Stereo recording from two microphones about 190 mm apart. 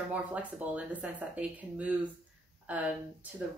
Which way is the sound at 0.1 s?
5° right (ahead or behind).